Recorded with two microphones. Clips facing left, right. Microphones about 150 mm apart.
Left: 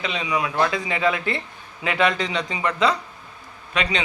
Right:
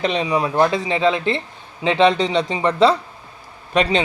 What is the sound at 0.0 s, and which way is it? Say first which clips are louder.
Speech: right 6 dB; 35° right (ahead or behind).